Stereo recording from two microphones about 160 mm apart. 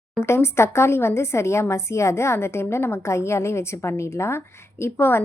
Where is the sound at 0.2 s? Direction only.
15° left (ahead or behind).